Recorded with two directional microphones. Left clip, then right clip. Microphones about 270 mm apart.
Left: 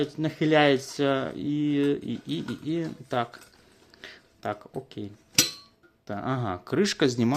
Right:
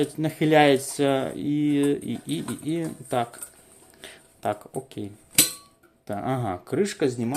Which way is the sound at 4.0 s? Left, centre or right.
Centre.